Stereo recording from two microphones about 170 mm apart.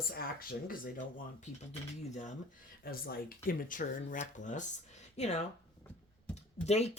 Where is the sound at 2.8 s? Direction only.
60° left (ahead or behind); by 5.4 s 40° left (ahead or behind).